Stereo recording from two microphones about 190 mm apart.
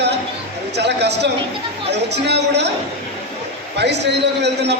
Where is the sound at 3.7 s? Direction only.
65° right (ahead or behind).